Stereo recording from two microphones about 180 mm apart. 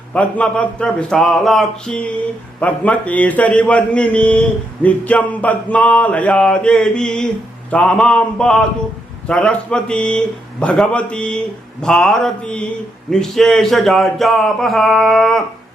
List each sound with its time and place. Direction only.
0.1 s a man's voice: 5° left (ahead or behind)